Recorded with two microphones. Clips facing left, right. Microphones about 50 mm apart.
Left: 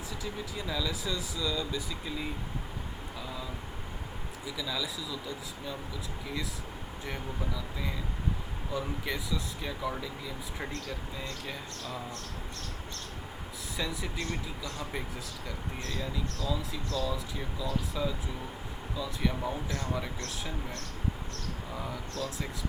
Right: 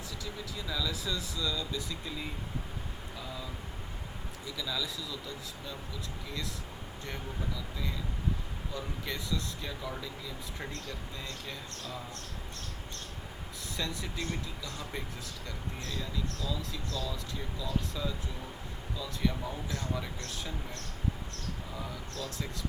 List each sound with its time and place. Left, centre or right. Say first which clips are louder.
0.5 s speech: left 1 dB; centre
4.4 s speech: left 1 dB; centre
7.0 s speech: left 2 dB; centre
8.7 s speech: left 5 dB; centre
13.7 s speech: left 2 dB; centre
15.8 s speech: left 2 dB; left
17.3 s speech: left 2 dB; centre